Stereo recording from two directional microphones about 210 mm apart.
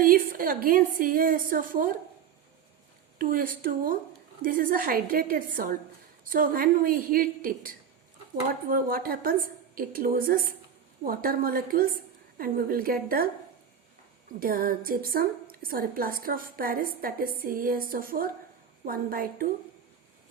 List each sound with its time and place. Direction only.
0.0 s a woman's voice: 45° right (ahead or behind)
3.2 s a woman's voice: 40° right (ahead or behind)
14.3 s a woman's voice: 45° right (ahead or behind)